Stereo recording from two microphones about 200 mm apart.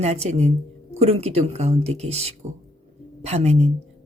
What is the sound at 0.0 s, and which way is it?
Speech, 35° right (ahead or behind).